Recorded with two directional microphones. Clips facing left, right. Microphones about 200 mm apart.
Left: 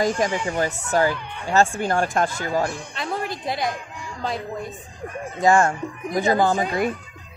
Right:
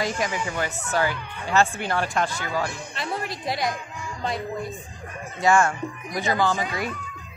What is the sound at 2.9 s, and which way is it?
Speech, centre (ahead or behind).